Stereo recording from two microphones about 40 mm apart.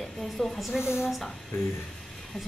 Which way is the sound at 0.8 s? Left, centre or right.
Left.